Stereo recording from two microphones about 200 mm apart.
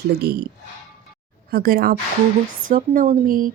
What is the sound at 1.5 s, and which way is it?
A woman's voice, 45° right (ahead or behind).